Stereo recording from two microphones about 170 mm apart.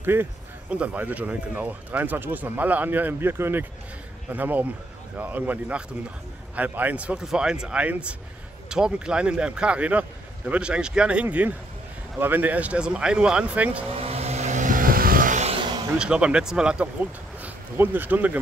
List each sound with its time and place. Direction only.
0.0 s speech: 10° right (ahead or behind)
13.9 s vehicle: 35° right (ahead or behind)
16.0 s speech: 5° right (ahead or behind)